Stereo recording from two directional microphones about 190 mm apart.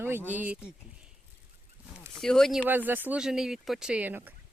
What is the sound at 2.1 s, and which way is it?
Speech, centre (ahead or behind).